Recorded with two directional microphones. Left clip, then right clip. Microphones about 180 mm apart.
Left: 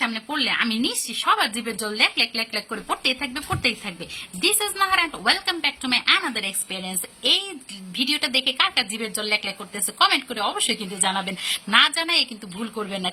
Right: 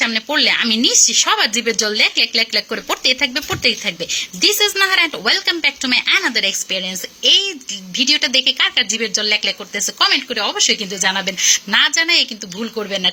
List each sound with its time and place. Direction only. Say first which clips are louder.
0.0 s a woman's voice: right 9 dB; 20° right (ahead or behind)